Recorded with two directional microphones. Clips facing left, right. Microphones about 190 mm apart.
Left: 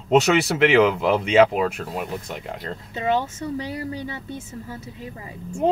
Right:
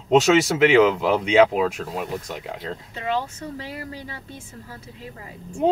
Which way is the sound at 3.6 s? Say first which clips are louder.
Left 5 dB; 20° left (ahead or behind).